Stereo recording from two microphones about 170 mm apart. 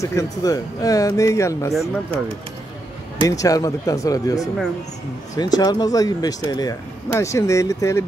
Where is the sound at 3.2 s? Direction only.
20° left (ahead or behind).